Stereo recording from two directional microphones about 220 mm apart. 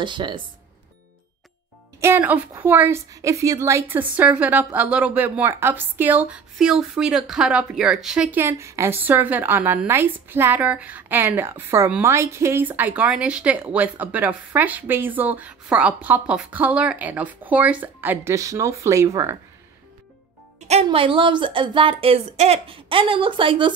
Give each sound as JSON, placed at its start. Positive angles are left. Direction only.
{"t": 0.0, "sound": "speech", "side_deg": -20}
{"t": 2.0, "sound": "a woman's voice", "side_deg": -10}
{"t": 20.6, "sound": "speech", "side_deg": -25}